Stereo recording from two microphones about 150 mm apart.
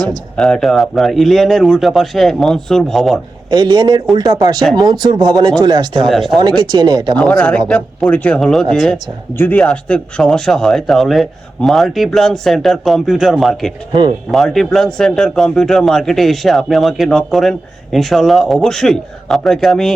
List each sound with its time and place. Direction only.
0.3 s speech: 5° left (ahead or behind)
3.5 s speech: 30° right (ahead or behind)
6.1 s speech: centre (ahead or behind)
6.6 s speech: 25° right (ahead or behind)
7.2 s speech: 5° left (ahead or behind)